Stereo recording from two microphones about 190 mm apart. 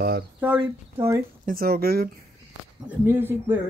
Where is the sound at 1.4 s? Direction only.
50° right (ahead or behind).